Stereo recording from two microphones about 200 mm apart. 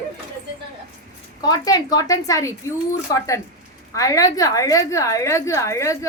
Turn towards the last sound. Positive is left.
turn(degrees=15)  # may be behind; listen again after turning